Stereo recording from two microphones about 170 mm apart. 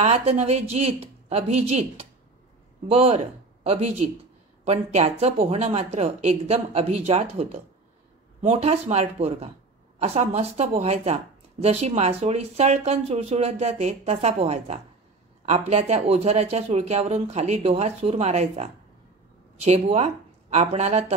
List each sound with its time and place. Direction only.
0.0 s speech: 35° right (ahead or behind)